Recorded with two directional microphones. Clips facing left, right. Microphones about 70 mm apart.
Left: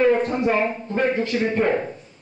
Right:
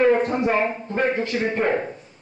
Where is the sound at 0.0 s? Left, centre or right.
Right.